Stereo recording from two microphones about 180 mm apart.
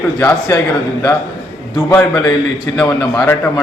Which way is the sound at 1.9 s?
15° left (ahead or behind).